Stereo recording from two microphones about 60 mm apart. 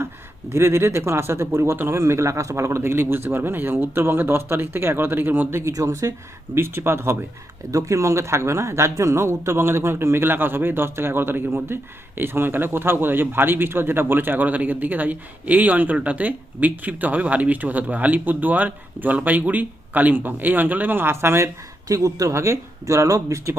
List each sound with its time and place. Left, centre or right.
0.5 s speech: right
5.7 s speech: right
7.7 s speech: right
21.8 s speech: right